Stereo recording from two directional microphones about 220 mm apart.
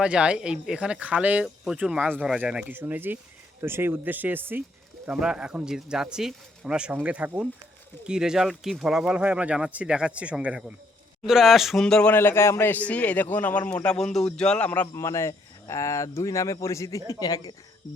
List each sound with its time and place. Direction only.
0.0 s a man's voice: 5° right (ahead or behind); by 17.5 s 15° left (ahead or behind)